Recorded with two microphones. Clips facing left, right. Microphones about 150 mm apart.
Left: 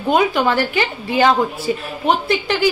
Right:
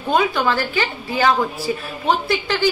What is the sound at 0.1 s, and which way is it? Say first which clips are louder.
A woman's voice: left 2 dB; 20° left (ahead or behind).